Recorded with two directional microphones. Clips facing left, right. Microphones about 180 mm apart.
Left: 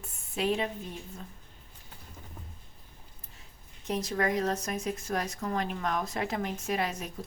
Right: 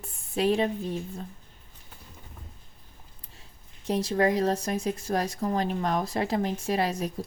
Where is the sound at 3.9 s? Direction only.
30° right (ahead or behind).